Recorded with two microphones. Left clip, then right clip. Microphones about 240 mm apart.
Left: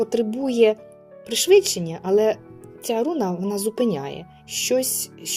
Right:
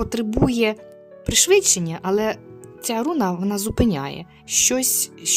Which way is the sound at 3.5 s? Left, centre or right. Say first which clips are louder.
Left 2 dB; right.